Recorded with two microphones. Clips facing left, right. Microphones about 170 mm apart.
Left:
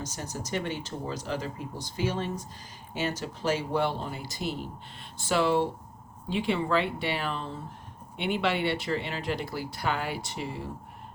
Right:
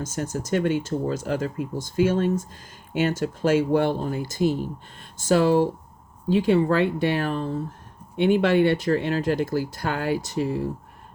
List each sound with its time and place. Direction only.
0.0 s speech: 50° right (ahead or behind)